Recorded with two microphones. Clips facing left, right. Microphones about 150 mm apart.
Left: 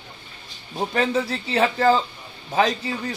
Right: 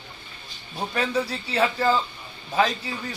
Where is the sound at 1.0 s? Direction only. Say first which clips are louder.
Left 2 dB; 20° left (ahead or behind).